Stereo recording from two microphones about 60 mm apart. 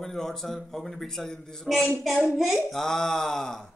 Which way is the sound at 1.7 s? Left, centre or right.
Centre.